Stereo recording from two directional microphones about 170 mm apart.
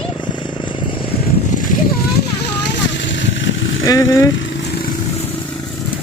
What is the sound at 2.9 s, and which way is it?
Vehicle, 90° left.